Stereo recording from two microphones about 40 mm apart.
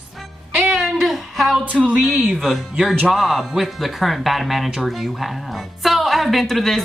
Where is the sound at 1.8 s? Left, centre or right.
Right.